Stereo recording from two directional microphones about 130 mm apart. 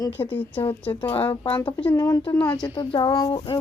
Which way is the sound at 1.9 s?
25° left (ahead or behind).